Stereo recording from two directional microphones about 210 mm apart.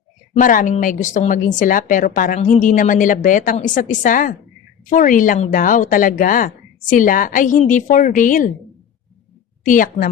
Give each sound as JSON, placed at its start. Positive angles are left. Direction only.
{"t": 0.3, "sound": "speech", "side_deg": 40}
{"t": 9.6, "sound": "speech", "side_deg": 40}